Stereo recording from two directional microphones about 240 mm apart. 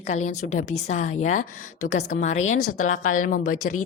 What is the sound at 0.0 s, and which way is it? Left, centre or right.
A woman's voice, left.